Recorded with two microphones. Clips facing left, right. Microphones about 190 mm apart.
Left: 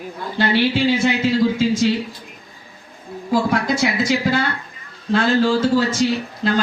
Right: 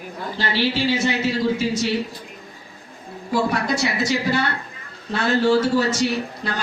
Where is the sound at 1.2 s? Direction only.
90° left.